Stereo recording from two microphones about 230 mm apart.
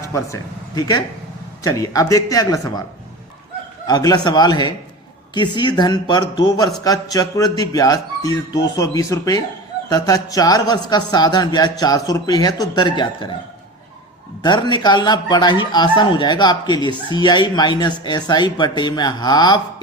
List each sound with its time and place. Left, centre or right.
0.0 s speech: centre
3.8 s a man's voice: centre
14.4 s a man's voice: centre